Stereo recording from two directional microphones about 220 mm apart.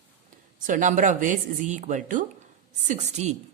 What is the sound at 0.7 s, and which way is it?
Speech, 35° right (ahead or behind).